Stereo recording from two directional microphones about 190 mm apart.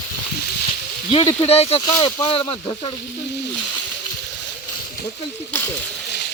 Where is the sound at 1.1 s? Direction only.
30° left (ahead or behind).